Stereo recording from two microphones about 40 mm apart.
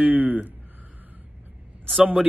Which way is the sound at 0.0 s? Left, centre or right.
Right.